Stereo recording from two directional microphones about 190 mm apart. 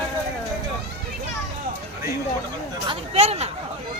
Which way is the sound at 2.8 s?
30° right (ahead or behind).